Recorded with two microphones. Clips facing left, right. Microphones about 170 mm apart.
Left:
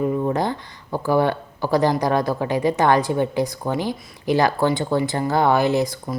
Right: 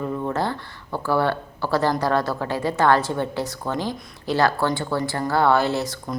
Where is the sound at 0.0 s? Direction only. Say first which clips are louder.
Left 4 dB; 15° left (ahead or behind).